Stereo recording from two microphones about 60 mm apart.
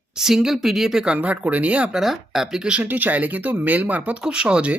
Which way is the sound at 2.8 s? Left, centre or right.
Right.